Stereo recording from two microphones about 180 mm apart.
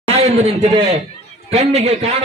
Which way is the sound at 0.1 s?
35° right (ahead or behind).